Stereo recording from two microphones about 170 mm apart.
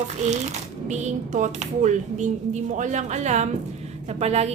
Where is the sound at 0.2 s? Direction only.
45° right (ahead or behind).